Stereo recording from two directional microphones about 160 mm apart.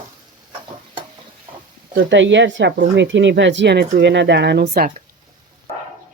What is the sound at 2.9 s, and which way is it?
Speech, 90° right.